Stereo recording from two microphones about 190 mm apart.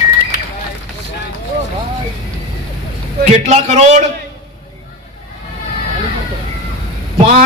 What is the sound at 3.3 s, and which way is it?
Speech, 40° right (ahead or behind).